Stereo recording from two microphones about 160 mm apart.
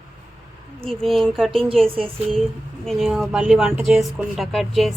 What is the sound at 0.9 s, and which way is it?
Speech, centre (ahead or behind).